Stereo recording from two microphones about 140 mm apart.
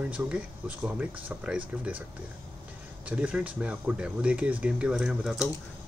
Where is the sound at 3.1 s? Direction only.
10° right (ahead or behind).